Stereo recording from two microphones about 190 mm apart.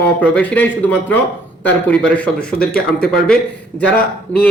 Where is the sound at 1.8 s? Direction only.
5° left (ahead or behind).